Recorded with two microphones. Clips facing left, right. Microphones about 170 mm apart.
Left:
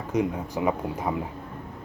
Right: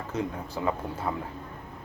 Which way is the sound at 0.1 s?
15° left (ahead or behind).